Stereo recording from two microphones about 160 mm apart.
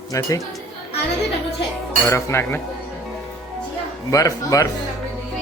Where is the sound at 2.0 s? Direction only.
15° left (ahead or behind).